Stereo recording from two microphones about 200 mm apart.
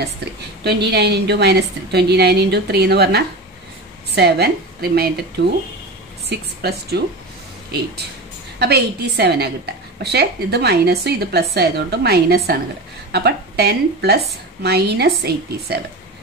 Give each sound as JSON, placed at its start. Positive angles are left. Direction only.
{"t": 0.7, "sound": "a woman's voice", "side_deg": -55}
{"t": 6.2, "sound": "a woman's voice", "side_deg": -55}
{"t": 8.5, "sound": "a woman's voice", "side_deg": -55}